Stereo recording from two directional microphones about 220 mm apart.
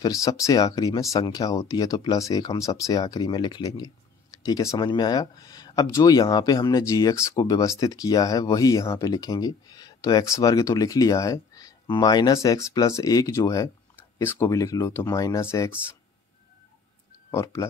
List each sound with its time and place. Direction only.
0.0 s speech: 15° left (ahead or behind)
17.3 s speech: 15° left (ahead or behind)